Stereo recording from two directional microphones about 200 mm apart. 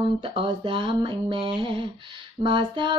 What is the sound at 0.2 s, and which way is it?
Child singing, 25° right (ahead or behind).